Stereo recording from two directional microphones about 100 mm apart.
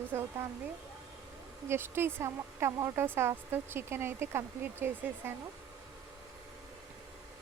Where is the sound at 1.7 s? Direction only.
25° right (ahead or behind).